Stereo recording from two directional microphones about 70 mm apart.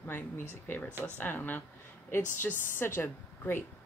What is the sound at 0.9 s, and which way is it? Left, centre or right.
Speech, right.